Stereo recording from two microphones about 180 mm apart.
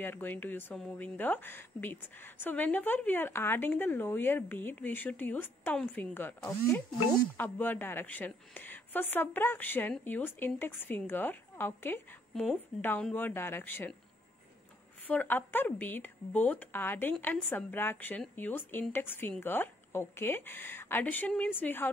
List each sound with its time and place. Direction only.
0.0 s speech: 10° left (ahead or behind)
15.0 s speech: 10° left (ahead or behind)